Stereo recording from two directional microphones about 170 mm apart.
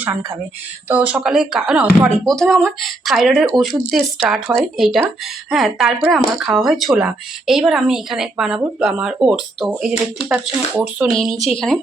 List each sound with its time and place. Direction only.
0.0 s a woman's voice: 10° right (ahead or behind)
11.3 s speech: 35° left (ahead or behind)